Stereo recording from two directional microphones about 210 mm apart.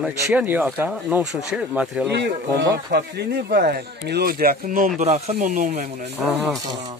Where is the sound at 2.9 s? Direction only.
50° right (ahead or behind).